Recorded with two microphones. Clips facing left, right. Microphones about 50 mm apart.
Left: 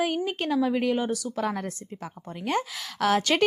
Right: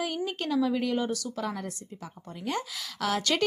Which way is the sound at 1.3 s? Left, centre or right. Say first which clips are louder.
Left 4 dB; left.